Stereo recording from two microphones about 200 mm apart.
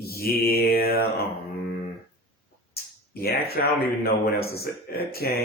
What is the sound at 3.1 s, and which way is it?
Speech, 50° left (ahead or behind).